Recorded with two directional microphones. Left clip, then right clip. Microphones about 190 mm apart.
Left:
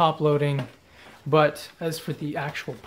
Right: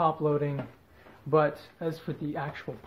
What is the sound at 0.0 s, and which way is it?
Speech, 45° left (ahead or behind).